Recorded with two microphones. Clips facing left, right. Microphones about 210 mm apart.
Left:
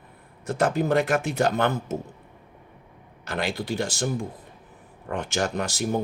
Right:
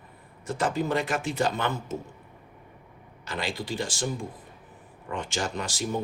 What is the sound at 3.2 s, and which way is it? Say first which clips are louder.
Speech: left 4 dB; 65° left (ahead or behind).